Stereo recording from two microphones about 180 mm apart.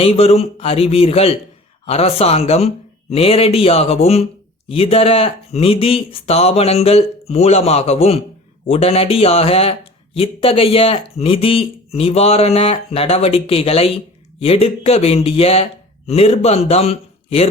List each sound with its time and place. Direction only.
0.0 s speech: 35° left (ahead or behind)